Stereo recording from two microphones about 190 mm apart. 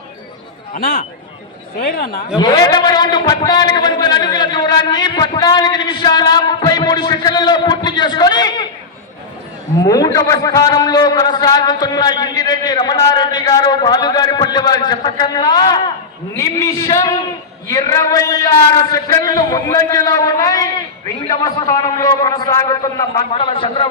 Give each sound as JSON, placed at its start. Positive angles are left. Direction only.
{"t": 0.7, "sound": "speech", "side_deg": 50}
{"t": 2.4, "sound": "a man's voice", "side_deg": 20}
{"t": 9.8, "sound": "a man's voice", "side_deg": 20}